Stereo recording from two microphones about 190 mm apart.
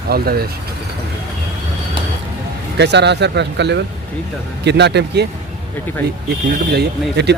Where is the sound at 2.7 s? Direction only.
65° right (ahead or behind).